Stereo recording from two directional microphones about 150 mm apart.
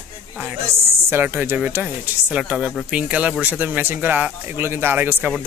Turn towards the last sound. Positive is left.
turn(degrees=-15)  # may be behind; listen again after turning